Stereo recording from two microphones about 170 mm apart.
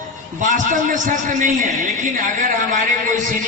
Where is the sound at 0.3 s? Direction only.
50° right (ahead or behind).